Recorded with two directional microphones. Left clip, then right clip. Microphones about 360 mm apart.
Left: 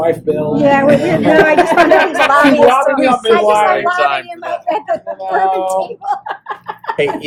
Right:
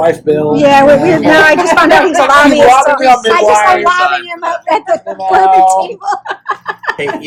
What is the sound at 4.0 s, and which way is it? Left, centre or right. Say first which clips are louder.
Speech: right 3 dB; centre.